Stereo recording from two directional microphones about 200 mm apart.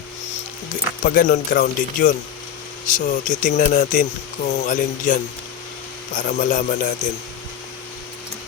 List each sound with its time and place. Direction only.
1.0 s speech: 45° left (ahead or behind)